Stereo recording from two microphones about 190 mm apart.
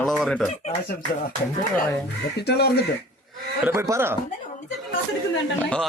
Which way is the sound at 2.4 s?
60° left (ahead or behind).